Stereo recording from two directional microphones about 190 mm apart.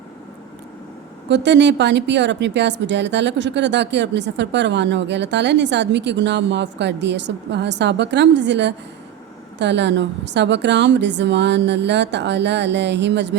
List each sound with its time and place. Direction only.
1.3 s a woman's voice: 65° right (ahead or behind)